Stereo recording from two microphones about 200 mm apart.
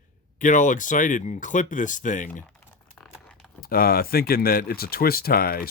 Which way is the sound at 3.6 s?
45° left (ahead or behind).